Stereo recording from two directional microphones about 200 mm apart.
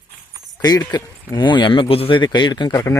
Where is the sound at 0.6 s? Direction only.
20° left (ahead or behind).